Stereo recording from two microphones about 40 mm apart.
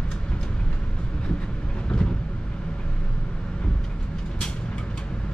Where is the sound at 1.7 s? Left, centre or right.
Left.